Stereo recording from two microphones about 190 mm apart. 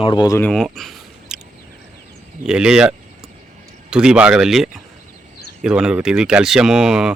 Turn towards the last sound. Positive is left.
turn(degrees=-5)  # may be behind; listen again after turning